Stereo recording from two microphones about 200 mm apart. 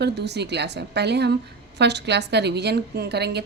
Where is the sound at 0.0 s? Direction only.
55° right (ahead or behind).